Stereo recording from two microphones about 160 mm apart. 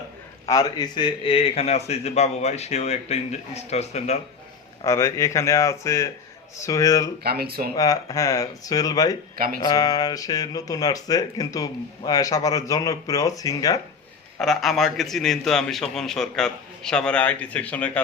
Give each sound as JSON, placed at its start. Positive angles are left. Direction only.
{"t": 0.4, "sound": "a man's voice", "side_deg": 25}
{"t": 4.8, "sound": "speech", "side_deg": 20}
{"t": 7.3, "sound": "speech", "side_deg": -75}
{"t": 7.8, "sound": "speech", "side_deg": 20}
{"t": 14.3, "sound": "a man's voice", "side_deg": 0}